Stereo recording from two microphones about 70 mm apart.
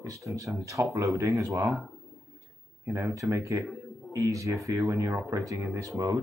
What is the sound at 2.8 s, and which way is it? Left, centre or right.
Speech, right.